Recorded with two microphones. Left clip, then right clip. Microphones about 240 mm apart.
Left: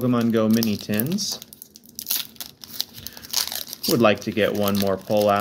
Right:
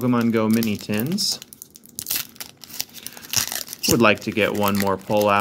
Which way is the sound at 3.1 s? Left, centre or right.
Centre.